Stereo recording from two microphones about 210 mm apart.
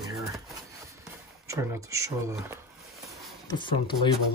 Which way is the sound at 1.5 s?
15° right (ahead or behind).